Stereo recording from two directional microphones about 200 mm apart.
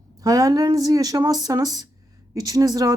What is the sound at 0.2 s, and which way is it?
Speech, 15° right (ahead or behind).